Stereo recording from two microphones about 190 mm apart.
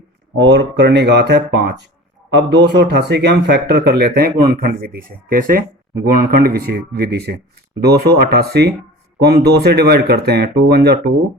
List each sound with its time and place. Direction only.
0.3 s speech: 65° right (ahead or behind)